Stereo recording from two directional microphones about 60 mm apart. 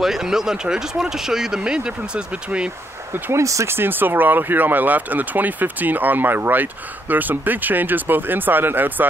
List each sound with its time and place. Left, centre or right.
0.0 s speech: centre
3.1 s speech: right